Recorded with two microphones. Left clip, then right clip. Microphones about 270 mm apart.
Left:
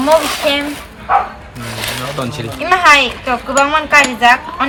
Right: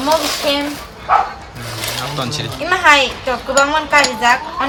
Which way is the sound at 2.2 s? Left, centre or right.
Centre.